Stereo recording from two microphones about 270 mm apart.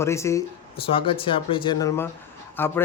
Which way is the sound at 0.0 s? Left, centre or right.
Centre.